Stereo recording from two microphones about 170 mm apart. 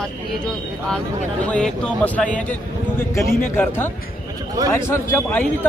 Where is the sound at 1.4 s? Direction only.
5° left (ahead or behind).